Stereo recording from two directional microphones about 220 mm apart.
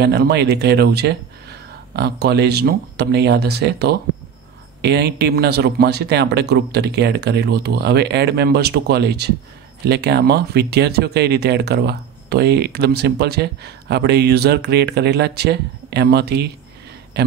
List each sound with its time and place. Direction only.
0.0 s speech: 50° right (ahead or behind)